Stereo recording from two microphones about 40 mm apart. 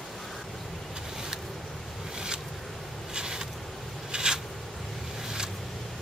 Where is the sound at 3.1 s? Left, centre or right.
Centre.